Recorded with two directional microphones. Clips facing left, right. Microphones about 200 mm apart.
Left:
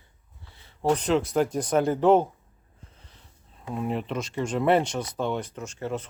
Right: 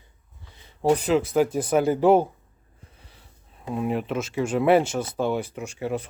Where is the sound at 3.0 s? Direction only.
10° right (ahead or behind).